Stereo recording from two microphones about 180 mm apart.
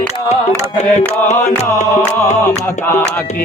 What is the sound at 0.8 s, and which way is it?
Music, 40° left (ahead or behind).